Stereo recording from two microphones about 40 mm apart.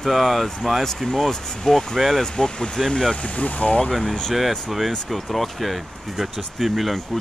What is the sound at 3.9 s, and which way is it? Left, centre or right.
Speech, centre.